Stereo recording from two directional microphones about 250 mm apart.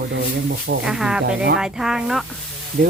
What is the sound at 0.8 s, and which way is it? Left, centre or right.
Speech, centre.